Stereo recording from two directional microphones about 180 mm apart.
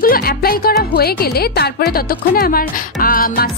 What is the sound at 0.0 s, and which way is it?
Speech, 55° left (ahead or behind).